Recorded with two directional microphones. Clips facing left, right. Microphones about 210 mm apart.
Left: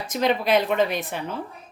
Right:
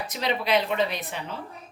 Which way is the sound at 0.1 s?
50° left (ahead or behind).